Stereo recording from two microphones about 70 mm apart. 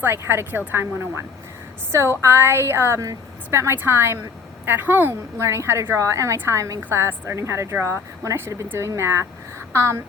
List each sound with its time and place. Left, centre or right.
0.0 s a woman's voice: right
5.4 s a woman's voice: right